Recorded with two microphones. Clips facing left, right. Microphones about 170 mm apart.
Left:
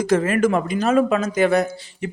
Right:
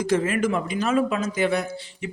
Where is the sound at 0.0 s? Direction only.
45° left (ahead or behind).